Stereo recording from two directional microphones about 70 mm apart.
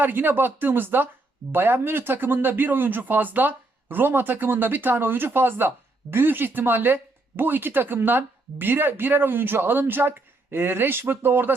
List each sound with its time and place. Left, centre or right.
0.0 s speech: right